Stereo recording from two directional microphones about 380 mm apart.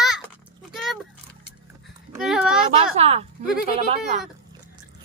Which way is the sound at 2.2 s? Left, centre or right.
Centre.